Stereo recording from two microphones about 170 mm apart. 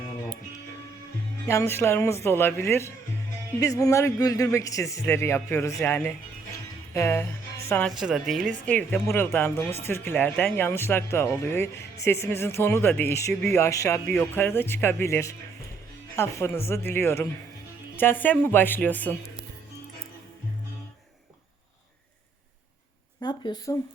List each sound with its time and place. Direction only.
1.5 s speech: 15° left (ahead or behind)
7.9 s speech: 5° right (ahead or behind)
23.2 s a sound: 25° left (ahead or behind)